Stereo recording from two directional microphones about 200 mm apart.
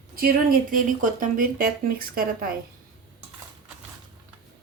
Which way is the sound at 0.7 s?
45° right (ahead or behind).